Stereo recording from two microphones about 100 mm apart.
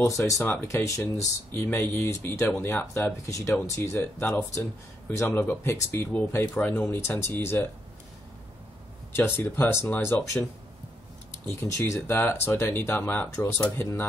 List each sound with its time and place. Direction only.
0.0 s speech: 30° left (ahead or behind)
3.3 s speech: 35° left (ahead or behind)
9.1 s speech: 20° left (ahead or behind)
11.7 s speech: 30° left (ahead or behind)